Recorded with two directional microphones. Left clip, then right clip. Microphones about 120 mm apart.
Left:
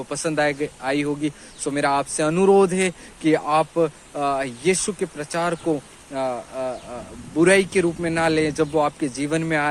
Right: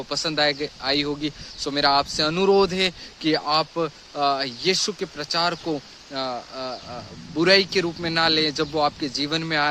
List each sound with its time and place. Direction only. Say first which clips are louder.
0.3 s a man's voice: left 2 dB; 30° right (ahead or behind)